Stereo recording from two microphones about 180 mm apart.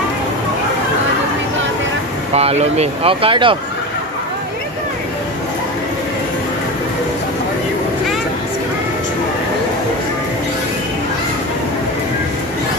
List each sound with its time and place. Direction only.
2.3 s speech: 35° right (ahead or behind)